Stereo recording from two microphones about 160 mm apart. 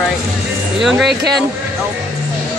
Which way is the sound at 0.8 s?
Centre (ahead or behind).